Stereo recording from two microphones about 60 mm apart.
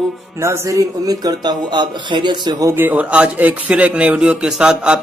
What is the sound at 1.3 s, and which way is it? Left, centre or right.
Speech, right.